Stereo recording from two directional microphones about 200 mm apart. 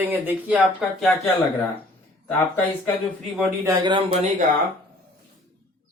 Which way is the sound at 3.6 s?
20° right (ahead or behind).